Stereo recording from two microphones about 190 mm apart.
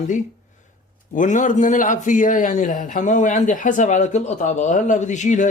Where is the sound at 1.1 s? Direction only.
40° left (ahead or behind).